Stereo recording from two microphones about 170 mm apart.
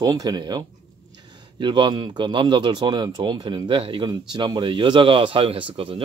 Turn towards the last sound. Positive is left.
turn(degrees=-35)  # may be behind; listen again after turning